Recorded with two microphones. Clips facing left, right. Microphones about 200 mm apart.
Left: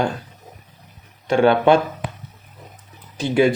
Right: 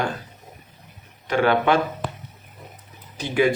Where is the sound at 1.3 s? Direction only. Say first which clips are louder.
Left 5 dB; 25° left (ahead or behind).